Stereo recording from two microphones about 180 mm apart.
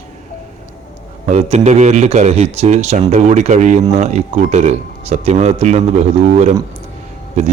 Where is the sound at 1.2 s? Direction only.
40° right (ahead or behind).